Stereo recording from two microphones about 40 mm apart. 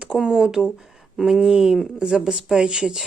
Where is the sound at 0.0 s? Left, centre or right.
Centre.